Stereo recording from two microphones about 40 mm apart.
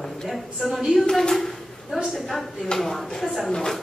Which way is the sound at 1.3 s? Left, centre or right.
Centre.